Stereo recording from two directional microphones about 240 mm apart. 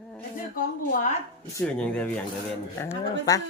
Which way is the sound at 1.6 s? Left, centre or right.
Centre.